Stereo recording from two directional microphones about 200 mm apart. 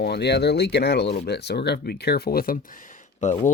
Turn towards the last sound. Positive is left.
turn(degrees=40)  # may be behind; listen again after turning